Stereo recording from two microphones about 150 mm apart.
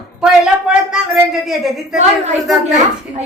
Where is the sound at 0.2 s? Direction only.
5° right (ahead or behind).